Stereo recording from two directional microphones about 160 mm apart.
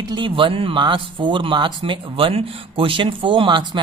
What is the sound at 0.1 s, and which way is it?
Speech, 30° right (ahead or behind).